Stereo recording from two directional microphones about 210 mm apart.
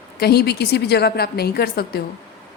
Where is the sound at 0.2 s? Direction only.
50° left (ahead or behind).